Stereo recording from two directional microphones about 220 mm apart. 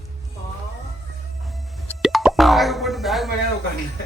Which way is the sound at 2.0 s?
Centre (ahead or behind).